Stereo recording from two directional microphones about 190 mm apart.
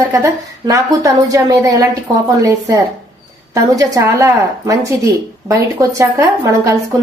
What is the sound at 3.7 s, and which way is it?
A woman's voice, 20° right (ahead or behind).